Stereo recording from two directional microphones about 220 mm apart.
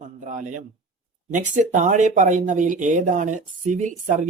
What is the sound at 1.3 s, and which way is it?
Speech, 35° right (ahead or behind).